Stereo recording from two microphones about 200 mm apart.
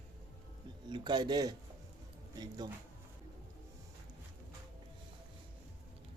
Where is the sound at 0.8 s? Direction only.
20° right (ahead or behind).